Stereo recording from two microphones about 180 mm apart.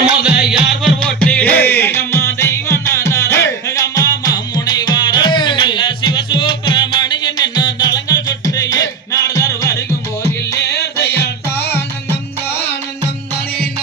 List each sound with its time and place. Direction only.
0.0 s music: 5° right (ahead or behind)
0.8 s music: 5° left (ahead or behind)
10.5 s music: 70° left (ahead or behind)